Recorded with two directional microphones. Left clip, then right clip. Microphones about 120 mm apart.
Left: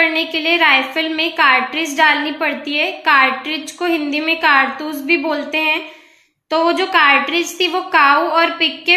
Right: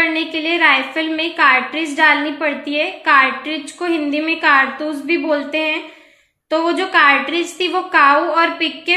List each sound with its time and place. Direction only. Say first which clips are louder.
0.0 s a woman's voice: left 2 dB; 30° left (ahead or behind)